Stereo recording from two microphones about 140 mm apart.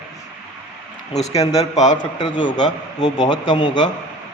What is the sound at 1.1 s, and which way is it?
Speech, 55° left (ahead or behind).